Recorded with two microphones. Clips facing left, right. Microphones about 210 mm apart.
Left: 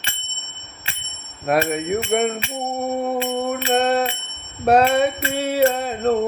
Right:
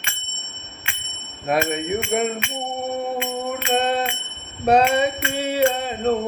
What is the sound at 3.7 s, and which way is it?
Bell, 10° left (ahead or behind).